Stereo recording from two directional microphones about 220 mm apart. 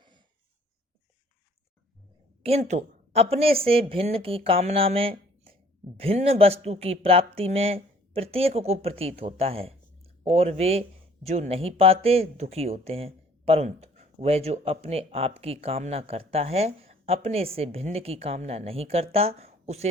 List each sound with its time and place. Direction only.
2.4 s a woman's voice: 30° right (ahead or behind)